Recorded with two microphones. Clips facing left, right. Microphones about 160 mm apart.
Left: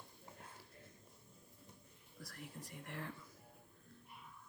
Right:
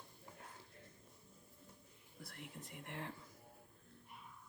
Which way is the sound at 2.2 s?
25° right (ahead or behind).